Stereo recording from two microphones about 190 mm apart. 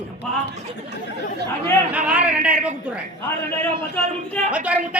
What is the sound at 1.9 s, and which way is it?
A man's voice, 5° right (ahead or behind).